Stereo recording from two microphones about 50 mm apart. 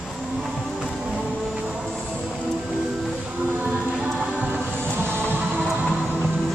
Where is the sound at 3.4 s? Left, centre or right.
Right.